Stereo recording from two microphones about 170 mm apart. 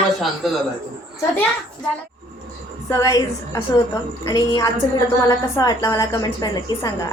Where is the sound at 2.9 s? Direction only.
20° left (ahead or behind).